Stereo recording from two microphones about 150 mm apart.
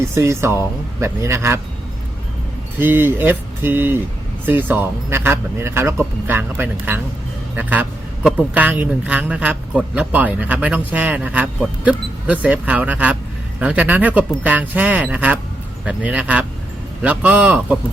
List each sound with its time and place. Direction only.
0.0 s speech: 20° right (ahead or behind)
2.7 s a man's voice: 15° right (ahead or behind)